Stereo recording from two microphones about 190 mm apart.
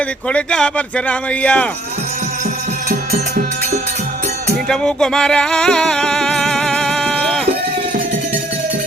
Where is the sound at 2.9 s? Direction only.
45° right (ahead or behind).